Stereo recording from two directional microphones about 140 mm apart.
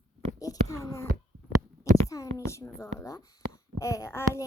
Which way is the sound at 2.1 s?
25° left (ahead or behind).